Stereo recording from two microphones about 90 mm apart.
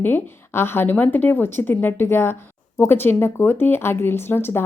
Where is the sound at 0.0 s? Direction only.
25° left (ahead or behind).